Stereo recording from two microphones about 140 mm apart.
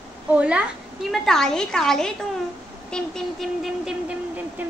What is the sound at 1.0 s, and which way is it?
A woman's voice, 5° left (ahead or behind).